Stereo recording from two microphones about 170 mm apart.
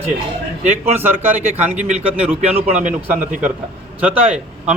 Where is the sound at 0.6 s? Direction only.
40° right (ahead or behind).